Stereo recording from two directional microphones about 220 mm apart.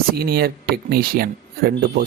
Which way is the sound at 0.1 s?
45° right (ahead or behind).